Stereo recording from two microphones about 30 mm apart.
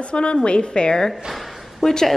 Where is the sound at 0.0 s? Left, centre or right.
Left.